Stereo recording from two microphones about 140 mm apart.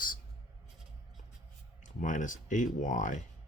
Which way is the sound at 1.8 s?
65° left (ahead or behind).